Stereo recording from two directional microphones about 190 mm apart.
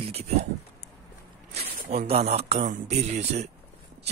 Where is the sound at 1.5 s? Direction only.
35° right (ahead or behind).